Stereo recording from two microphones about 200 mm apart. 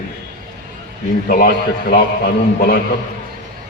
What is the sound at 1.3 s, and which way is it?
A man's voice, 45° left (ahead or behind).